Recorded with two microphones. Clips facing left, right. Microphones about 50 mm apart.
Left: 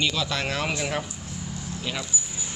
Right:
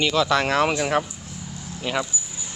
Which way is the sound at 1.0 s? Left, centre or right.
Centre.